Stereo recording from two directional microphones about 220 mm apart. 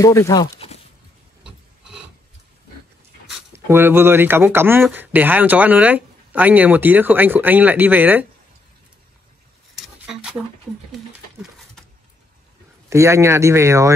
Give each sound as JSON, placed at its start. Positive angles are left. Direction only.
{"t": 0.0, "sound": "speech", "side_deg": 15}
{"t": 1.4, "sound": "filing", "side_deg": -5}
{"t": 3.3, "sound": "speech", "side_deg": -10}
{"t": 9.8, "sound": "a sound", "side_deg": -5}
{"t": 12.9, "sound": "speech", "side_deg": -10}